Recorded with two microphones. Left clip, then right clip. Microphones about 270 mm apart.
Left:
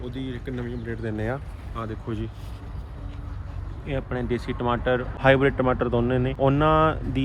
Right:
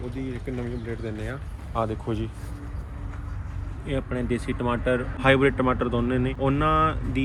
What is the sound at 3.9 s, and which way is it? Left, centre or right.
Speech, centre.